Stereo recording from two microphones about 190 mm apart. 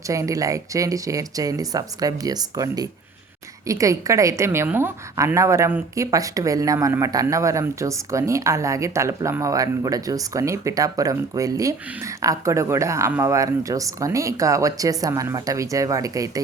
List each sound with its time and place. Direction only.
0.1 s a woman's voice: 15° right (ahead or behind)